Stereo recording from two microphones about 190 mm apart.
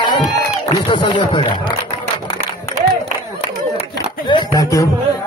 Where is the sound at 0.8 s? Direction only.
25° left (ahead or behind).